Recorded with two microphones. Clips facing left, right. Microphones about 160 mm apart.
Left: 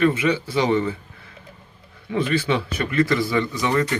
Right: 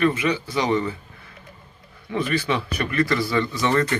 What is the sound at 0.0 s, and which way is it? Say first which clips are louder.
Speech: left 2 dB; 25° left (ahead or behind).